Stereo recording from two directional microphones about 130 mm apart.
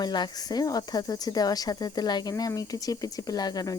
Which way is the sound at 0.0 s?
35° left (ahead or behind).